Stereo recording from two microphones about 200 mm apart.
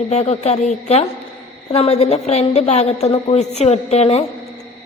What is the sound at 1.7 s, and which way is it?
A woman's voice, 30° left (ahead or behind).